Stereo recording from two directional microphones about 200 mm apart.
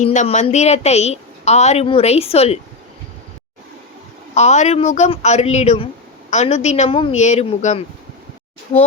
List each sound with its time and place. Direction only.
0.0 s a woman's voice: 35° left (ahead or behind)
4.4 s a woman's voice: 35° left (ahead or behind)